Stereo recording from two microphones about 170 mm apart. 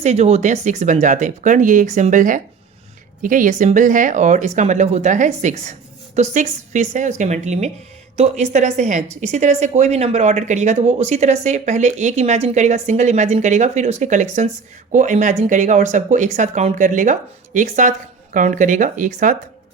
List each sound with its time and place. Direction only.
0.0 s speech: 40° right (ahead or behind)